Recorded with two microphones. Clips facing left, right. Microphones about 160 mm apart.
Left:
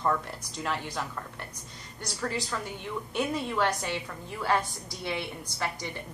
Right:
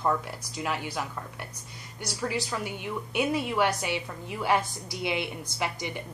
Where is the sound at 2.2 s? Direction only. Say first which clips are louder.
Right 2 dB; 10° right (ahead or behind).